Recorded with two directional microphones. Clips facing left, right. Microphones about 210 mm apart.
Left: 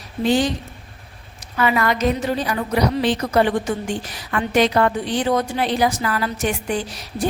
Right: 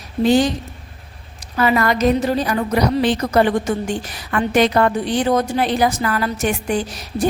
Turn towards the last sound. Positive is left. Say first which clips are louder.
# right 3 dB
turn(degrees=-45)  # may be behind; listen again after turning